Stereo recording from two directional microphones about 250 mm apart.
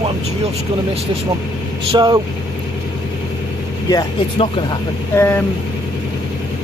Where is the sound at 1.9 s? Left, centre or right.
Centre.